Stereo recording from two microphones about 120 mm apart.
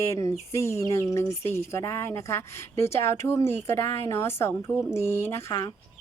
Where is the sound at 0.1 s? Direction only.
25° left (ahead or behind).